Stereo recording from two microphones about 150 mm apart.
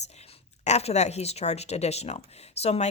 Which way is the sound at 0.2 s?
45° left (ahead or behind).